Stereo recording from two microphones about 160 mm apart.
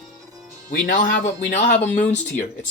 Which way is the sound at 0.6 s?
55° left (ahead or behind).